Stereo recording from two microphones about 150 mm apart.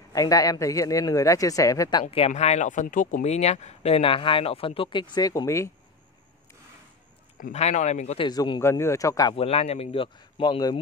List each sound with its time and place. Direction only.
0.1 s speech: 25° left (ahead or behind)
2.0 s speech: 40° left (ahead or behind); by 5.7 s 20° left (ahead or behind)
7.3 s speech: 65° left (ahead or behind)
7.6 s speech: 50° left (ahead or behind)
8.2 s speech: 30° left (ahead or behind)
9.3 s speech: 40° left (ahead or behind)